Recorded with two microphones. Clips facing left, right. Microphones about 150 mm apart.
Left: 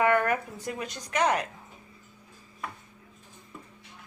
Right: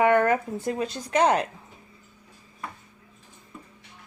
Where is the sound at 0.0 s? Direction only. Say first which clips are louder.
Right 4 dB; 25° right (ahead or behind).